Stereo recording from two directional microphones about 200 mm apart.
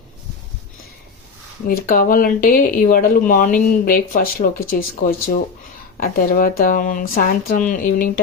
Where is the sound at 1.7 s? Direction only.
45° left (ahead or behind).